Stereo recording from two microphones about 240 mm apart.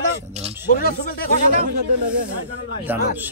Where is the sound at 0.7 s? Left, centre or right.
Left.